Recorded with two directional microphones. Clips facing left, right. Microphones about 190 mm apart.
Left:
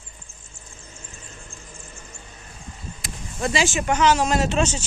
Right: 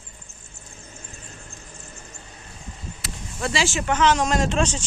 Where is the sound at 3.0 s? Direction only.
15° left (ahead or behind).